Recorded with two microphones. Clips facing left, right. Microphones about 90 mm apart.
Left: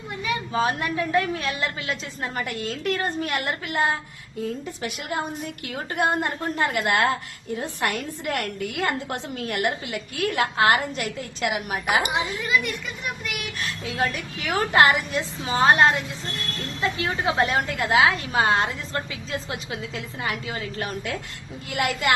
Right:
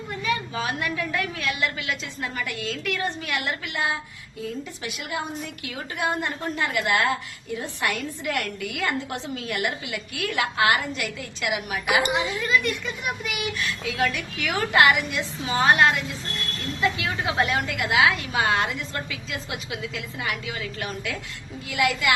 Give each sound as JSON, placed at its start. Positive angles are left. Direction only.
{"t": 0.5, "sound": "a woman's voice", "side_deg": 35}
{"t": 12.0, "sound": "a woman's voice", "side_deg": 15}
{"t": 13.2, "sound": "speech", "side_deg": 0}
{"t": 13.6, "sound": "a woman's voice", "side_deg": 40}